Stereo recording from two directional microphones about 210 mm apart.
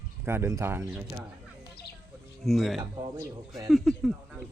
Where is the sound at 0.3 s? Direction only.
10° right (ahead or behind).